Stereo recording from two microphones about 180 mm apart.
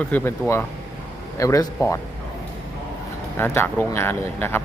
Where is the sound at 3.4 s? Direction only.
10° left (ahead or behind).